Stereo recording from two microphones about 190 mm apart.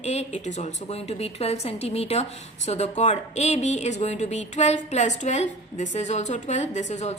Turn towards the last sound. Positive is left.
turn(degrees=35)  # may be behind; listen again after turning